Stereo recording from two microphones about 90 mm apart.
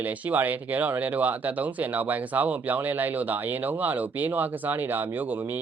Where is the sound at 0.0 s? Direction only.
20° right (ahead or behind).